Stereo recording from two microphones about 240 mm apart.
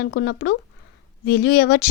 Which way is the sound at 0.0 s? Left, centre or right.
Left.